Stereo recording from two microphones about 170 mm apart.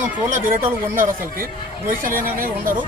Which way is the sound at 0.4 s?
55° right (ahead or behind).